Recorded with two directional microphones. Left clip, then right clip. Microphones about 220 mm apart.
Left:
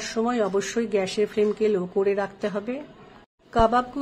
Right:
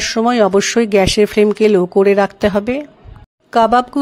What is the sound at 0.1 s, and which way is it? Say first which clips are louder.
Speech: right 11 dB; 40° right (ahead or behind).